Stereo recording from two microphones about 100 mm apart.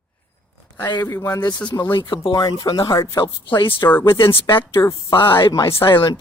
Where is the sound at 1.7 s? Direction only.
45° left (ahead or behind).